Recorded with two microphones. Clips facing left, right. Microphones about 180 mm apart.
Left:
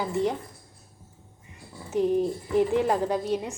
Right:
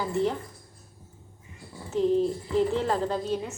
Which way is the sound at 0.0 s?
15° left (ahead or behind).